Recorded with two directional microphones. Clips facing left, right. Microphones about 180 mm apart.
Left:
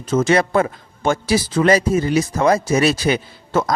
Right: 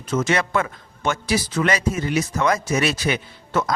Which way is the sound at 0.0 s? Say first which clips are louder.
Left 5 dB; 30° left (ahead or behind).